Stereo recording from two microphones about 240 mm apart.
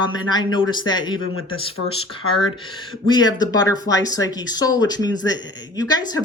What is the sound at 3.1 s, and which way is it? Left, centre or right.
Speech, centre.